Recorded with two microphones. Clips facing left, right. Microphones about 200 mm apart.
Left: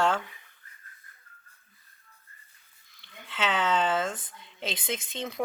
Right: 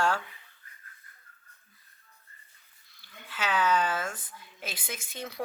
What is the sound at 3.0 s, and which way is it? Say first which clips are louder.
A woman's voice: left 4 dB; 25° left (ahead or behind).